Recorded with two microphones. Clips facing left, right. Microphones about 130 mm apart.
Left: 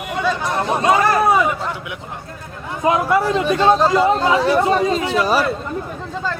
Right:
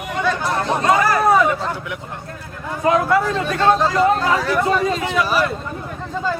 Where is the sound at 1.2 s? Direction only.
10° left (ahead or behind); by 5.4 s 35° left (ahead or behind).